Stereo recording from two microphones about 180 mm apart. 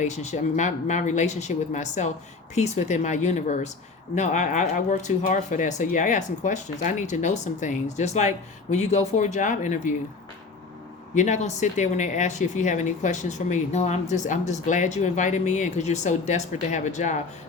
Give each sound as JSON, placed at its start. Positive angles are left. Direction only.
{"t": 0.0, "sound": "speech", "side_deg": 40}
{"t": 11.1, "sound": "speech", "side_deg": 40}